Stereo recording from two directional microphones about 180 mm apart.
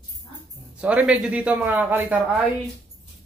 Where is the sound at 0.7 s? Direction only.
5° right (ahead or behind).